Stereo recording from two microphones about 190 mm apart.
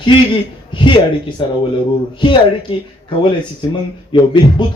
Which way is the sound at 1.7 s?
25° left (ahead or behind).